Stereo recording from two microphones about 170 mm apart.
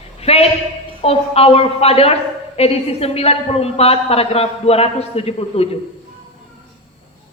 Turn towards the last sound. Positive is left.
turn(degrees=35)  # may be behind; listen again after turning